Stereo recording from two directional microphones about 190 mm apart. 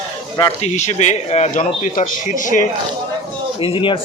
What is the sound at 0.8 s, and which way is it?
Speech, 35° left (ahead or behind).